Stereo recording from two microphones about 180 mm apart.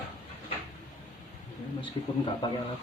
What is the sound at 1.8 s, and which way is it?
Speech, 25° left (ahead or behind).